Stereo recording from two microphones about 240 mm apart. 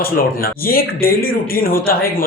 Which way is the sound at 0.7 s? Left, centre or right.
Left.